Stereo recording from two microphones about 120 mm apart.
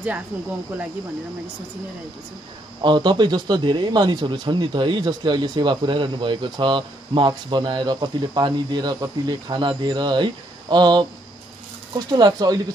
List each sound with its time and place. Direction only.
2.8 s speech: 40° right (ahead or behind)
12.1 s speech: 35° right (ahead or behind)